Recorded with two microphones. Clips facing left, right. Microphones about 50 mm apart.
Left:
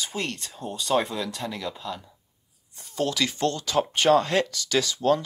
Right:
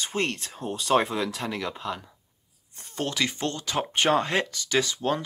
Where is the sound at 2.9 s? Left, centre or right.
Right.